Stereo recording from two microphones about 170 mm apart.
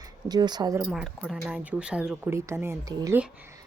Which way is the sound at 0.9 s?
Centre (ahead or behind).